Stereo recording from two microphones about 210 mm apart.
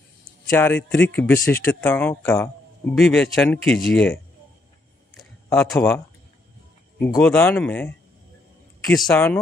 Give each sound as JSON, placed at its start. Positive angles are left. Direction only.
{"t": 0.5, "sound": "speech", "side_deg": 10}
{"t": 5.1, "sound": "a sound", "side_deg": 5}
{"t": 7.0, "sound": "speech", "side_deg": 5}
{"t": 9.1, "sound": "speech", "side_deg": 5}